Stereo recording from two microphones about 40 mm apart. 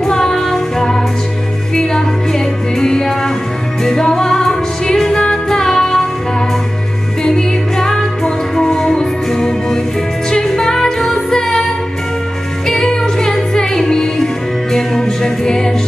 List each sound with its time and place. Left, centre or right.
0.0 s music: centre
7.2 s music: centre
12.6 s music: centre